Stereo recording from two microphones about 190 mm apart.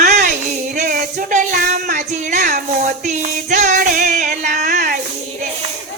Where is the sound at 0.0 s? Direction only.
45° right (ahead or behind).